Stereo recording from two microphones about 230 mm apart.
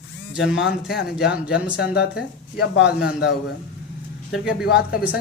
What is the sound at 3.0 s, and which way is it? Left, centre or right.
Speech, left.